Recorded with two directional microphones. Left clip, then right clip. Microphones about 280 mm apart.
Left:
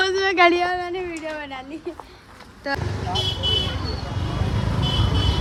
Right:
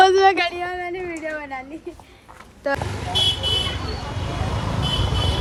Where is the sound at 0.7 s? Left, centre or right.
Centre.